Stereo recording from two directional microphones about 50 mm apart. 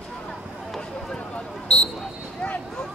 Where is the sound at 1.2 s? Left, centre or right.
Left.